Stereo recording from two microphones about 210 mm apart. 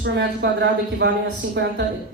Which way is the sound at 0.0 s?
55° right (ahead or behind).